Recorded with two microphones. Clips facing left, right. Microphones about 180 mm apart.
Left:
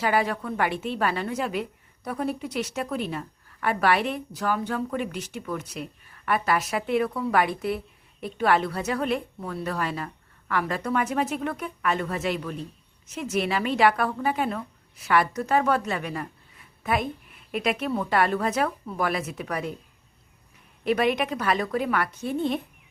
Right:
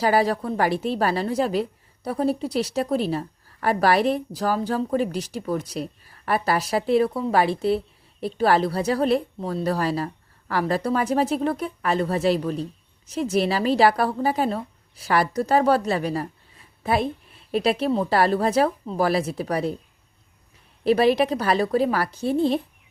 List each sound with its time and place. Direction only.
0.0 s speech: 35° right (ahead or behind)
20.8 s speech: 35° right (ahead or behind)